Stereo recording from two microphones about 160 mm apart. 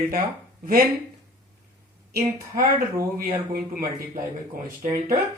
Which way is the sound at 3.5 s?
65° right (ahead or behind).